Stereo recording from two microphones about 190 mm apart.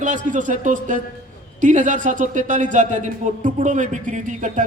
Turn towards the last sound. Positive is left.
turn(degrees=-40)  # may be behind; listen again after turning